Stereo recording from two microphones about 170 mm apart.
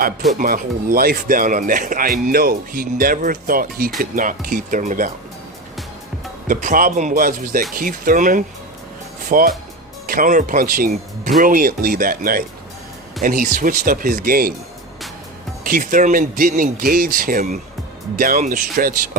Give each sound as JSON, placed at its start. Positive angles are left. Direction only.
{"t": 0.3, "sound": "speech", "side_deg": -55}
{"t": 6.5, "sound": "speech", "side_deg": -50}
{"t": 15.6, "sound": "speech", "side_deg": -55}